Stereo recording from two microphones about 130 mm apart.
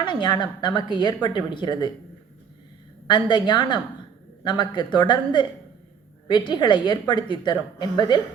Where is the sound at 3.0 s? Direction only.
35° left (ahead or behind).